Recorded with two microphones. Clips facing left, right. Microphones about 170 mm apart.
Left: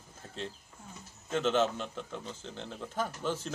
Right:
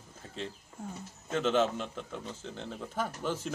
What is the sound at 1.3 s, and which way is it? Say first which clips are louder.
Speech: right 1 dB; centre (ahead or behind).